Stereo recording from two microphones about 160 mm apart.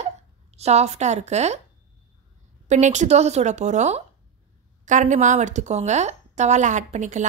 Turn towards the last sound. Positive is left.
turn(degrees=-50)  # may be behind; listen again after turning